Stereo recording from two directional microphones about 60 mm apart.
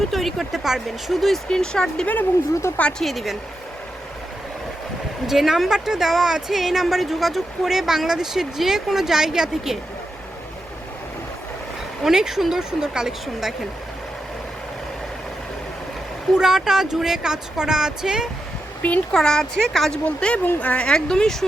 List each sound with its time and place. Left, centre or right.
0.1 s a woman's voice: centre
1.5 s speech: centre
2.6 s speech: left
3.0 s a woman's voice: centre
5.2 s a woman's voice: centre
12.0 s speech: centre
16.3 s speech: centre
18.8 s a child's voice: left
19.1 s speech: centre
20.1 s speech: centre
20.8 s speech: centre